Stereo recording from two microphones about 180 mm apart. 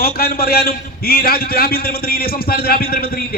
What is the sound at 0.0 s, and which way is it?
A man's voice, 55° left (ahead or behind).